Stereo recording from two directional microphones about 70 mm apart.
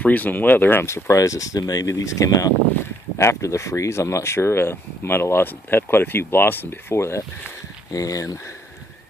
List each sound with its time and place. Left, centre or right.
0.0 s speech: left
3.2 s speech: left
7.9 s speech: left